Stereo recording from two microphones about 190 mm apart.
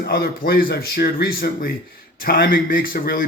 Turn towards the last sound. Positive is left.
turn(degrees=50)  # may be behind; listen again after turning